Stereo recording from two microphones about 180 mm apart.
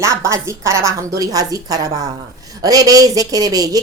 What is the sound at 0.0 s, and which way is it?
A woman's voice, 15° right (ahead or behind).